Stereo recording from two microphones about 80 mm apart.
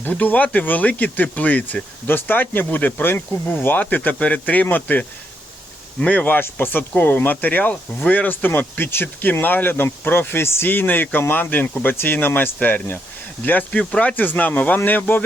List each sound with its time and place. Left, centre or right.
0.0 s speech: left